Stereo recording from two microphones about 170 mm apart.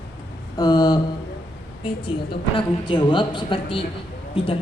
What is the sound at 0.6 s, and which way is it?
A woman's voice, 25° left (ahead or behind).